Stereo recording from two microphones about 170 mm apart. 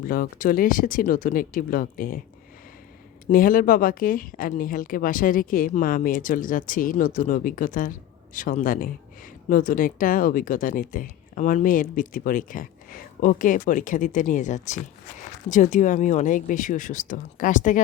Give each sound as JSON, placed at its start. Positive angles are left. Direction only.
{"t": 0.0, "sound": "speech", "side_deg": 55}
{"t": 3.2, "sound": "speech", "side_deg": 55}